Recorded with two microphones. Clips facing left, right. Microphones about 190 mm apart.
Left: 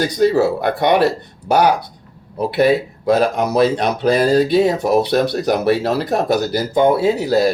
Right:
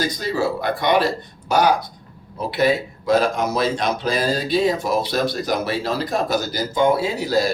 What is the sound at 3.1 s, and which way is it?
Speech, 60° left (ahead or behind).